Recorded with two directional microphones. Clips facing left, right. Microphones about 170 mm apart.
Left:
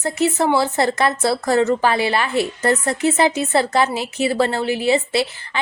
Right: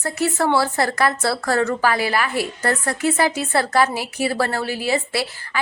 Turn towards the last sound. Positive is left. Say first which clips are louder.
# left 4 dB
turn(degrees=20)  # may be behind; listen again after turning